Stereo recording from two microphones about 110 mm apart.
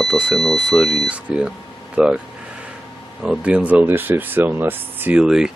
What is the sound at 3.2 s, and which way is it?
Speech, 10° right (ahead or behind).